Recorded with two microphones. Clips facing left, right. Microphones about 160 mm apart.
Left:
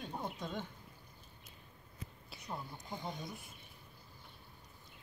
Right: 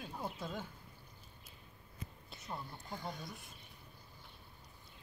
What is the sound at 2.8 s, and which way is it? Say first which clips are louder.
Speech: left 1 dB; 15° left (ahead or behind).